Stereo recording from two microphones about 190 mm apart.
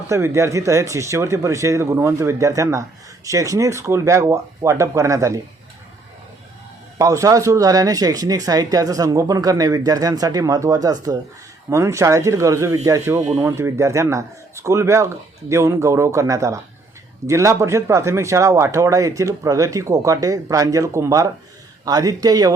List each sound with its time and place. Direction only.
0.1 s speech: 15° right (ahead or behind)
7.0 s speech: 15° right (ahead or behind)